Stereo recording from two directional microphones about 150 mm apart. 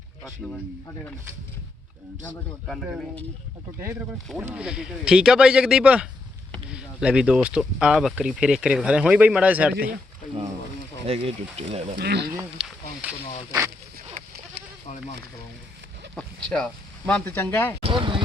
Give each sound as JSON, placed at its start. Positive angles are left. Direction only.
{"t": 2.6, "sound": "speech", "side_deg": 0}
{"t": 4.5, "sound": "speech", "side_deg": -5}
{"t": 11.0, "sound": "speech", "side_deg": -40}
{"t": 11.9, "sound": "speech", "side_deg": -90}
{"t": 12.5, "sound": "a sound", "side_deg": -5}
{"t": 14.6, "sound": "goat", "side_deg": -90}
{"t": 16.1, "sound": "speech", "side_deg": 5}
{"t": 17.8, "sound": "speech", "side_deg": -35}